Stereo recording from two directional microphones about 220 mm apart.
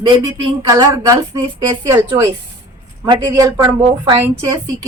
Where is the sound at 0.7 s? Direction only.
15° right (ahead or behind).